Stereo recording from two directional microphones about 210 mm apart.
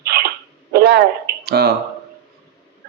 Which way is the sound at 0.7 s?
50° right (ahead or behind).